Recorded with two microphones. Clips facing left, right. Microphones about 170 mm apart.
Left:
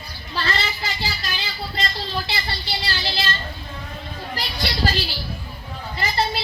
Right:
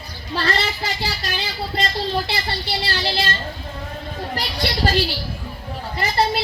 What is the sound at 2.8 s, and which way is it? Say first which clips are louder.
Speech: right 3 dB; 55° right (ahead or behind).